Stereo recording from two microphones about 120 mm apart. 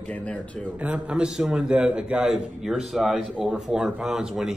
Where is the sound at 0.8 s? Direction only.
10° right (ahead or behind).